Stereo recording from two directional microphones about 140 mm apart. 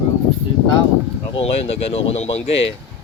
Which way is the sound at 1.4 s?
45° left (ahead or behind).